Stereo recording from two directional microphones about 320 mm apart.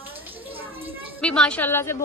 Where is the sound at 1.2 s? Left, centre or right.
Centre.